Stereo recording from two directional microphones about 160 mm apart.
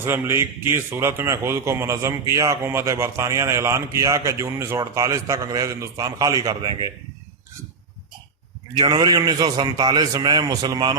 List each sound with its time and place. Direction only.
0.0 s a man's voice: 15° right (ahead or behind)
8.7 s a man's voice: 25° right (ahead or behind)